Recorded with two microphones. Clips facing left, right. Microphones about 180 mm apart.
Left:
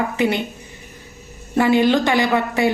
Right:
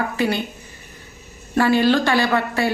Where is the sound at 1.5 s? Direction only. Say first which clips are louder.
Left 1 dB; 20° left (ahead or behind).